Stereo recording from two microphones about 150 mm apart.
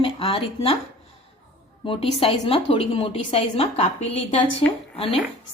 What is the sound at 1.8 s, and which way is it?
Speech, 40° left (ahead or behind).